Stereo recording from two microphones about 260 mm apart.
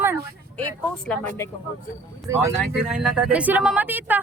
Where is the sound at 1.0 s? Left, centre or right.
Centre.